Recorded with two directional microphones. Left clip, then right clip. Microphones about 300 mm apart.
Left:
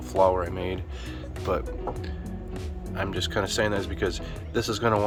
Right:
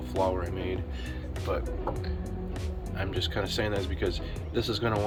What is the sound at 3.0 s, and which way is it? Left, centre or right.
Speech, centre.